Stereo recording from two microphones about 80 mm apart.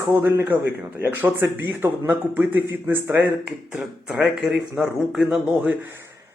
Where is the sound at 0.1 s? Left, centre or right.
Right; by 5.4 s centre.